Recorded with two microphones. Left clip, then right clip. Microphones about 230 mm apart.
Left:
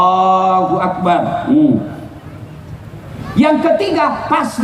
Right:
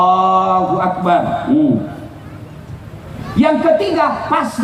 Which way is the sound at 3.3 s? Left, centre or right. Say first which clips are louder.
Even; left.